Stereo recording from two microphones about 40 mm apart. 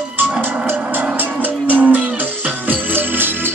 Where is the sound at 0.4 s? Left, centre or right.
Right.